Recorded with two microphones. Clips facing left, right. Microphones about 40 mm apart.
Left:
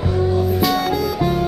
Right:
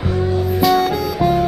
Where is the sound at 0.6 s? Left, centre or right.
Centre.